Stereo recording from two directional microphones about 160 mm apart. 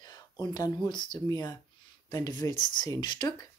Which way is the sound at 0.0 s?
25° left (ahead or behind).